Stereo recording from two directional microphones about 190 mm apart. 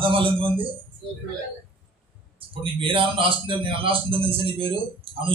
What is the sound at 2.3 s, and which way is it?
A man's voice, 30° right (ahead or behind).